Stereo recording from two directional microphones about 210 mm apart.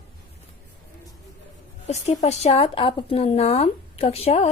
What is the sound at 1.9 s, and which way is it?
A woman's voice, 30° left (ahead or behind).